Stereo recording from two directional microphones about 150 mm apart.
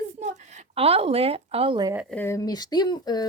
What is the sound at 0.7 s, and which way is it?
Speech, 40° right (ahead or behind).